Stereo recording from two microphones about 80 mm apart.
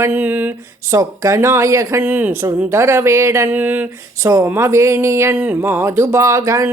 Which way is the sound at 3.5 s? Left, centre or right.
Right.